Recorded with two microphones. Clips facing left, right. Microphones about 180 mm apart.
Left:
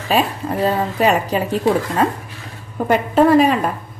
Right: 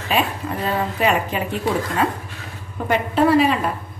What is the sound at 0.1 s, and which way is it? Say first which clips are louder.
A woman's voice: left 4 dB; 40° left (ahead or behind).